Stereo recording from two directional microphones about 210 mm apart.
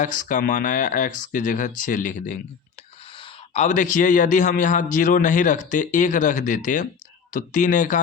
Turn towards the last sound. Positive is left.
turn(degrees=40)  # may be behind; listen again after turning